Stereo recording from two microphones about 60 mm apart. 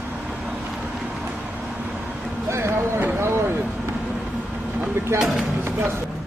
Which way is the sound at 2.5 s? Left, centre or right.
Right.